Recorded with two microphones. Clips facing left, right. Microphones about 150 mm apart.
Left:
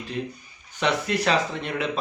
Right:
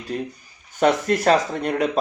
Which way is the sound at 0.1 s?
45° right (ahead or behind).